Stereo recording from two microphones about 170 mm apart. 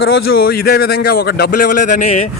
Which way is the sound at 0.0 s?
70° left (ahead or behind).